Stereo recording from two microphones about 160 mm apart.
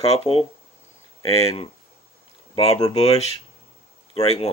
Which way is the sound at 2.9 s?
40° left (ahead or behind).